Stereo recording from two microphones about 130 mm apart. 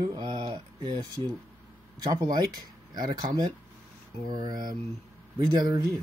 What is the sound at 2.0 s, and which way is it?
Speech, 35° right (ahead or behind).